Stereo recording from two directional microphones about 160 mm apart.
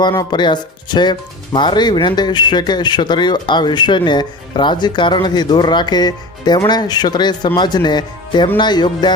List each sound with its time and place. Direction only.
0.0 s speech: 25° left (ahead or behind)